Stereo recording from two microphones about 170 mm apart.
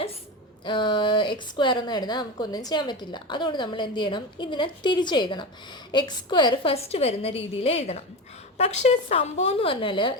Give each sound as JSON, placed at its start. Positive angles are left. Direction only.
{"t": 0.6, "sound": "a woman's voice", "side_deg": 30}